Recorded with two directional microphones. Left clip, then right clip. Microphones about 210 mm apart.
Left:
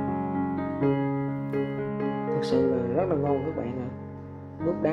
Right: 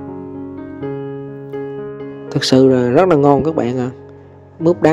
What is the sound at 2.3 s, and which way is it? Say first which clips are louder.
Speech: right 13 dB; 50° right (ahead or behind).